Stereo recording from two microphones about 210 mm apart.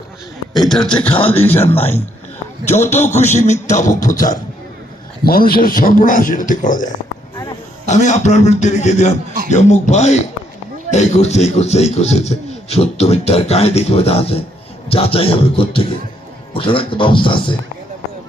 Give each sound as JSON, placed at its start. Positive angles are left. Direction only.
{"t": 0.5, "sound": "a man's voice", "side_deg": 0}
{"t": 1.0, "sound": "speech", "side_deg": 25}
{"t": 1.3, "sound": "speech", "side_deg": 10}
{"t": 1.7, "sound": "a man's voice", "side_deg": 30}
{"t": 7.9, "sound": "a man's voice", "side_deg": 35}